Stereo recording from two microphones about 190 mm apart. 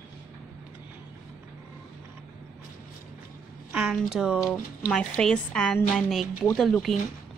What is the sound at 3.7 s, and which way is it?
Speech, centre (ahead or behind).